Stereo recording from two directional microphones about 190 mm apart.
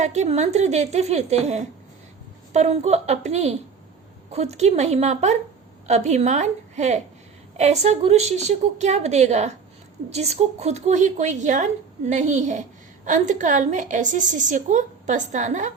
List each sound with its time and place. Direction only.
0.0 s a woman's voice: 35° right (ahead or behind)